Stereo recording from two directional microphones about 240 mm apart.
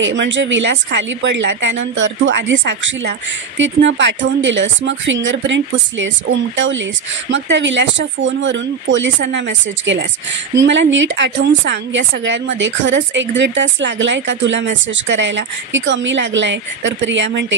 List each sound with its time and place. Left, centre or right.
0.0 s a woman's voice: right